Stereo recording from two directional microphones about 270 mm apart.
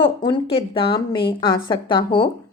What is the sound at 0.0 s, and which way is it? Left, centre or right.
A woman's voice, centre.